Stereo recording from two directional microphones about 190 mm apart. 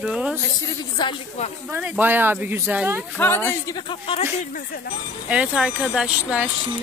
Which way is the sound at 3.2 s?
10° left (ahead or behind).